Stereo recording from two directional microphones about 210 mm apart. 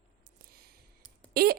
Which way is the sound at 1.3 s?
45° right (ahead or behind).